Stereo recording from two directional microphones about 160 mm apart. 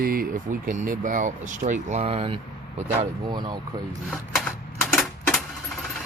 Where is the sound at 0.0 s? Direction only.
65° right (ahead or behind); by 3.6 s 30° right (ahead or behind).